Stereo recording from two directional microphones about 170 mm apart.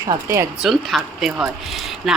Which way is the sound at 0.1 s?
15° right (ahead or behind).